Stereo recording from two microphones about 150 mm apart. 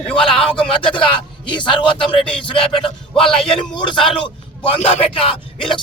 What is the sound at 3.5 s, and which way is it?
A man's voice, 30° left (ahead or behind).